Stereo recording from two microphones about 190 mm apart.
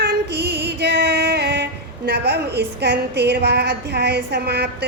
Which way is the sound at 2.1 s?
60° right (ahead or behind).